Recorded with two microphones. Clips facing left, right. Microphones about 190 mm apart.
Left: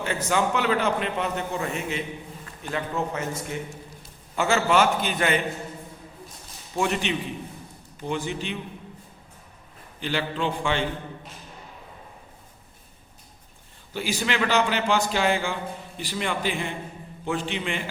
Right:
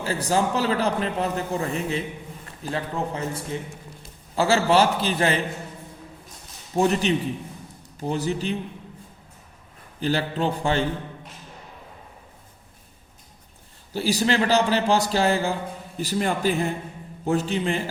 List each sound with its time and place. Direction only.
0.0 s a man's voice: 35° right (ahead or behind)
6.7 s a man's voice: 35° right (ahead or behind)
10.0 s a man's voice: 40° right (ahead or behind)
13.9 s a man's voice: 35° right (ahead or behind)